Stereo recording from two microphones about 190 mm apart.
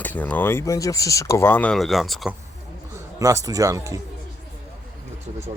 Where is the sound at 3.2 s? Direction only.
20° right (ahead or behind).